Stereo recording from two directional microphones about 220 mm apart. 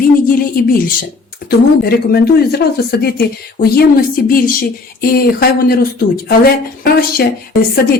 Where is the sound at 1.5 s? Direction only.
45° left (ahead or behind).